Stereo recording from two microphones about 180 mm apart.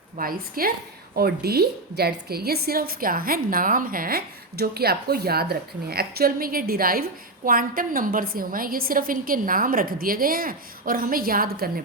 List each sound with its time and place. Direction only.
0.2 s a woman's voice: 55° right (ahead or behind)